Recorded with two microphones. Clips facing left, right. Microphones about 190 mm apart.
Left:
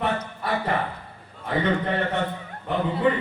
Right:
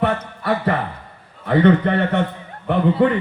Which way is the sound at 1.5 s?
65° right (ahead or behind).